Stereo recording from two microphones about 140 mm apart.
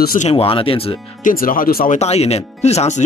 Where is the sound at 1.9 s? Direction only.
50° left (ahead or behind).